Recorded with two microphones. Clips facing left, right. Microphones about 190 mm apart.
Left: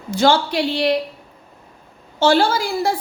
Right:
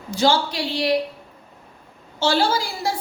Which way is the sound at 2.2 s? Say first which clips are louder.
Left 4 dB; 55° left (ahead or behind).